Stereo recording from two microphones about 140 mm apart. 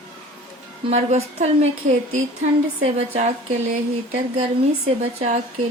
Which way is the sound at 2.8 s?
50° right (ahead or behind).